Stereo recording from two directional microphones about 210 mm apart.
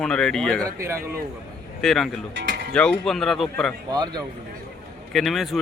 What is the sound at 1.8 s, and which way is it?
Speech, centre (ahead or behind).